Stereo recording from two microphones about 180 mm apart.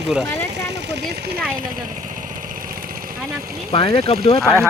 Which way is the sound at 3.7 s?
30° left (ahead or behind).